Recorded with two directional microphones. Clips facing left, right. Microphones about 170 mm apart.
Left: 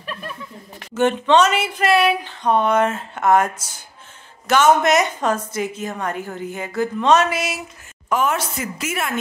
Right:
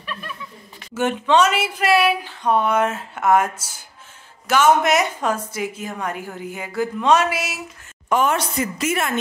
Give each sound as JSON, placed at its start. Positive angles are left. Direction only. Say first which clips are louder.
{"t": 0.0, "sound": "chuckle", "louder": "left 2 dB", "side_deg": 40}
{"t": 0.9, "sound": "a woman's voice", "louder": "left 2 dB", "side_deg": -10}